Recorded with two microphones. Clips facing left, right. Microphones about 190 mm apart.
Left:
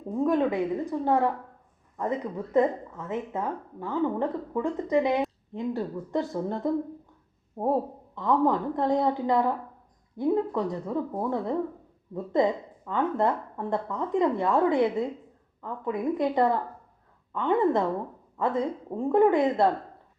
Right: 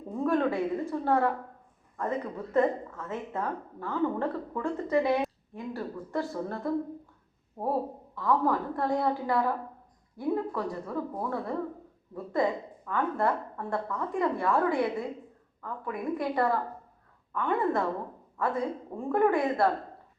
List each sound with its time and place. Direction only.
0.3 s a woman's voice: 15° left (ahead or behind)
8.1 s a woman's voice: 20° left (ahead or behind)